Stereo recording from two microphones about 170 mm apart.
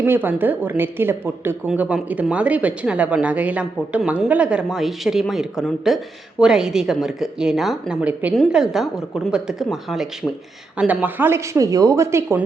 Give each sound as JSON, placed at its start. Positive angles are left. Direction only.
{"t": 0.0, "sound": "speech", "side_deg": -10}